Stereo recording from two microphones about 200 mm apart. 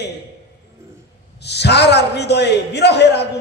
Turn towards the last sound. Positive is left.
turn(degrees=55)  # may be behind; listen again after turning